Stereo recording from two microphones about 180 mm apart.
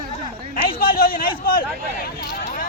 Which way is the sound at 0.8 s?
55° left (ahead or behind).